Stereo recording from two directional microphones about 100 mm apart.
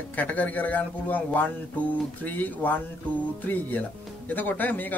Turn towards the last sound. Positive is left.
turn(degrees=15)  # may be behind; listen again after turning